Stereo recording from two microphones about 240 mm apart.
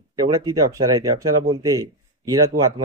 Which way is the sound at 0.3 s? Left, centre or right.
Centre.